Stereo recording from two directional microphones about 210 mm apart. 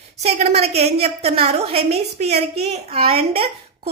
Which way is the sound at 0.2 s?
30° right (ahead or behind).